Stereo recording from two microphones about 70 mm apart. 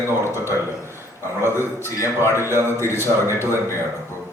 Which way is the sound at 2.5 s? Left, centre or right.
Right.